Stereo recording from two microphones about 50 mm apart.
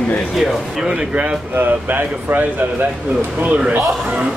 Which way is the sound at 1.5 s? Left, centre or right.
Right.